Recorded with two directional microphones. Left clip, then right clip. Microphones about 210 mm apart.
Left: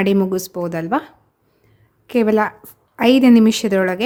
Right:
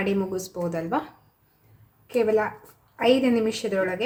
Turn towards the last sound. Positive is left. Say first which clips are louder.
# left 7 dB
turn(degrees=50)  # may be behind; listen again after turning